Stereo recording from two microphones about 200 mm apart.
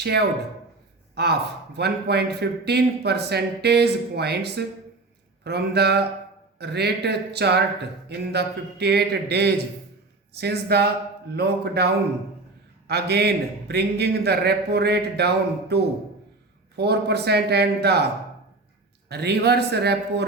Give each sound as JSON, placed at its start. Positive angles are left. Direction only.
{"t": 1.1, "sound": "a man's voice", "side_deg": -55}
{"t": 5.4, "sound": "a sound", "side_deg": -55}
{"t": 6.6, "sound": "a man's voice", "side_deg": -55}
{"t": 12.9, "sound": "a man's voice", "side_deg": -55}
{"t": 19.0, "sound": "a man's voice", "side_deg": -55}